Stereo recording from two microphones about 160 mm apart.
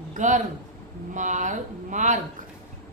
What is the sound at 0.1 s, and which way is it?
A woman's voice, 50° right (ahead or behind).